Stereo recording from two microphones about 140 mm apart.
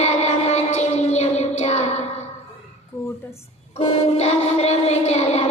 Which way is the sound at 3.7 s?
50° left (ahead or behind).